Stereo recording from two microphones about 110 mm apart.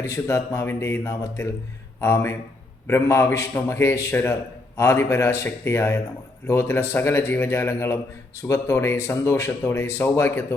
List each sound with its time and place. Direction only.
0.0 s speech: 25° left (ahead or behind)